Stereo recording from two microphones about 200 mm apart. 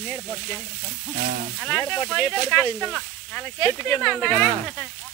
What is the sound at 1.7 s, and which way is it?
Speech, 15° left (ahead or behind).